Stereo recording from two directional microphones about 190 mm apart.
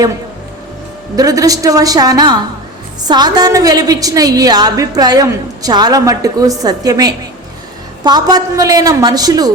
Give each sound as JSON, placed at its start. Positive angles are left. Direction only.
{"t": 1.1, "sound": "a woman's voice", "side_deg": -20}